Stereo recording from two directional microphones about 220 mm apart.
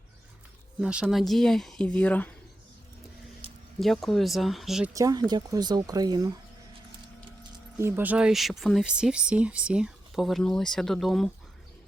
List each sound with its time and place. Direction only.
0.8 s speech: 5° right (ahead or behind)
3.8 s speech: centre (ahead or behind)
4.9 s speech: 15° right (ahead or behind); by 11.3 s centre (ahead or behind)